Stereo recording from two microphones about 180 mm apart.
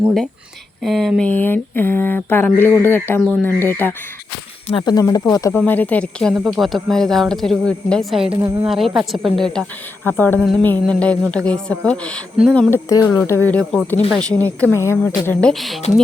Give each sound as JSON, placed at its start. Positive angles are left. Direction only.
{"t": 0.8, "sound": "speech", "side_deg": 0}
{"t": 4.7, "sound": "speech", "side_deg": 25}
{"t": 8.3, "sound": "a woman's voice", "side_deg": -15}
{"t": 8.6, "sound": "speech", "side_deg": -5}
{"t": 12.7, "sound": "speech", "side_deg": 20}